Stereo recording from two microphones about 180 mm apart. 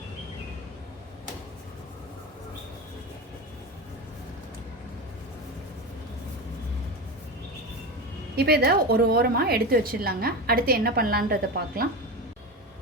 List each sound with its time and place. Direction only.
8.4 s a woman's voice: 60° right (ahead or behind)